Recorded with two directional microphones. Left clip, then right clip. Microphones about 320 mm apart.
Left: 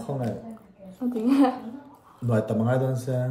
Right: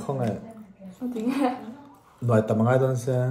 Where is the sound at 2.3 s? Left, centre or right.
Right.